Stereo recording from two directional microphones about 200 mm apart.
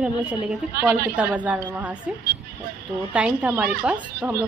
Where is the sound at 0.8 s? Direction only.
50° right (ahead or behind).